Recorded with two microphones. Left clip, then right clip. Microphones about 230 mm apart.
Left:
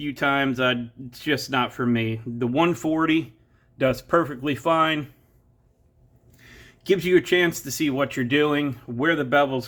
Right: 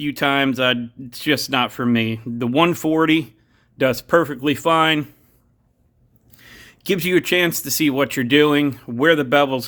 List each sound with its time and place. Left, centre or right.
0.0 s speech: right
6.3 s speech: right